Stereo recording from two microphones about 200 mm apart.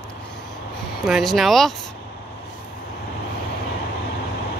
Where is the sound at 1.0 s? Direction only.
Centre (ahead or behind).